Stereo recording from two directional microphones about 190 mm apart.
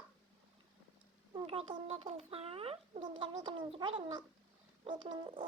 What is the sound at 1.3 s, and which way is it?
A child's voice, 25° right (ahead or behind).